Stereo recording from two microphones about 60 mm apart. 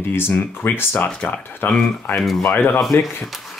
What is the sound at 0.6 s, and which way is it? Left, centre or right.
Speech, left.